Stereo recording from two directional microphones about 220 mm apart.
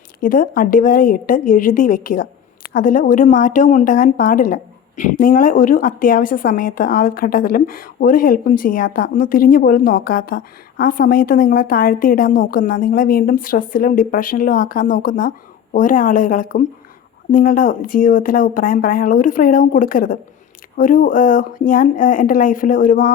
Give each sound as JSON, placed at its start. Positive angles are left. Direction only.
{"t": 0.2, "sound": "speech", "side_deg": 40}